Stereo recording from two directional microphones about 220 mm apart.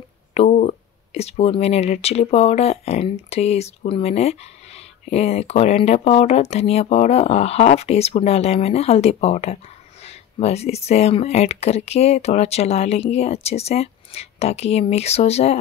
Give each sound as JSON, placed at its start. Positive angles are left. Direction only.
{"t": 0.3, "sound": "speech", "side_deg": 30}